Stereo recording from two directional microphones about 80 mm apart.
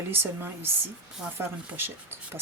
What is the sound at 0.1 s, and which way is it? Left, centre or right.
Speech, right.